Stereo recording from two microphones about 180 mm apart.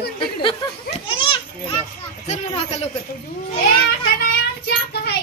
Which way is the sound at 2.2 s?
35° left (ahead or behind).